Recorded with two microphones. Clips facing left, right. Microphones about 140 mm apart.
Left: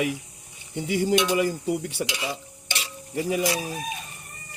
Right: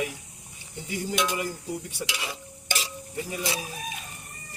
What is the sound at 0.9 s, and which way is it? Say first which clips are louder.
Cutlery: left 7 dB; 75° left (ahead or behind).